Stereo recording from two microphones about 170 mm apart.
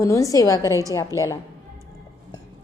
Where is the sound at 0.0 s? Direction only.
20° left (ahead or behind).